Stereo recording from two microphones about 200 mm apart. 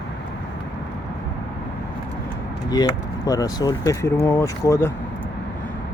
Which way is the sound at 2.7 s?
20° left (ahead or behind).